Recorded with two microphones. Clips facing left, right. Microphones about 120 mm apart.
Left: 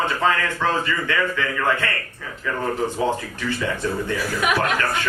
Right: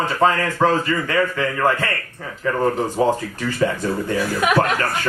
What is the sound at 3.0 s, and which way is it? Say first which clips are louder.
Speech: right 6 dB; 40° right (ahead or behind).